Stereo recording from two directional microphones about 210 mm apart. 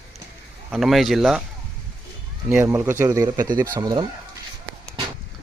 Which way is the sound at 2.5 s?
10° right (ahead or behind).